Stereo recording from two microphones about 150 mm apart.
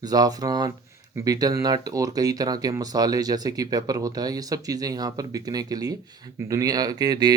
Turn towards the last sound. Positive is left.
turn(degrees=-25)  # may be behind; listen again after turning